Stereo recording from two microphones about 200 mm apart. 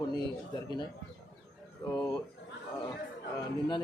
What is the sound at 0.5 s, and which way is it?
Speech, 20° left (ahead or behind).